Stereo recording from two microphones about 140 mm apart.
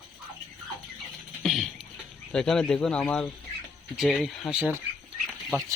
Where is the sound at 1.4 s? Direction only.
Centre (ahead or behind).